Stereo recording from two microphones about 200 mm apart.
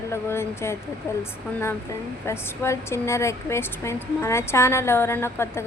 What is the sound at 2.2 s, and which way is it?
Speech, 10° left (ahead or behind).